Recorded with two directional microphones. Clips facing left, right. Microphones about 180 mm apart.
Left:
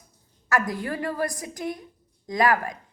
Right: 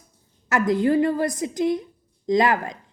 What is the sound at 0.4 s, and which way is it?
A woman's voice, 20° right (ahead or behind).